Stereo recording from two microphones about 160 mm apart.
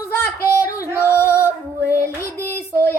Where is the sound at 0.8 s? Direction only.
15° left (ahead or behind).